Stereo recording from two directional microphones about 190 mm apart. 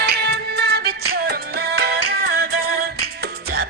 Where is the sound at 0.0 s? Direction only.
60° right (ahead or behind).